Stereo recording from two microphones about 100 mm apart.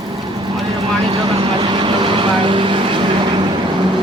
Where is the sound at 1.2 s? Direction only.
55° right (ahead or behind).